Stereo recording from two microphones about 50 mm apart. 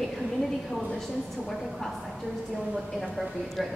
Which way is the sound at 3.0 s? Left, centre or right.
Centre.